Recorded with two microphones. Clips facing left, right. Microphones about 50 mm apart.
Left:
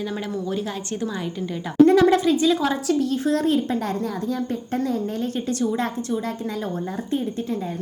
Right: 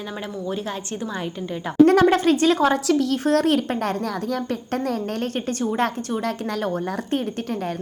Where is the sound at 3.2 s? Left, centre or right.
Right.